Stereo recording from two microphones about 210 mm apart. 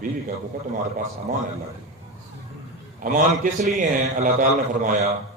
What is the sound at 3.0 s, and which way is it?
A man's voice, 40° right (ahead or behind).